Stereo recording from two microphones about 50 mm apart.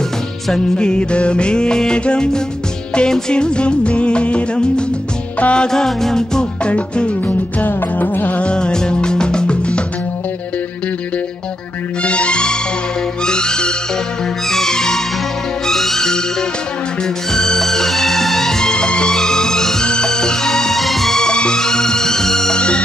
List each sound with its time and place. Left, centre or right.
0.7 s music: centre
2.9 s music of bollywood: centre
5.7 s music: centre
6.7 s music: left
8.4 s music: left
12.0 s music: left; by 16.2 s centre
17.3 s music: centre